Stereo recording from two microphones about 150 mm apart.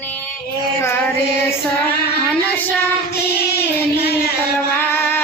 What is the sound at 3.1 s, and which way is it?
Child singing, 90° left.